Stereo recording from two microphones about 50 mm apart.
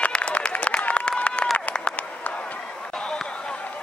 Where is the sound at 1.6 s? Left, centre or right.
Left.